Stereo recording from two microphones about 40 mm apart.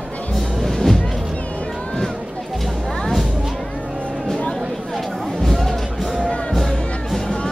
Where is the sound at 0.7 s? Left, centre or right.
Centre.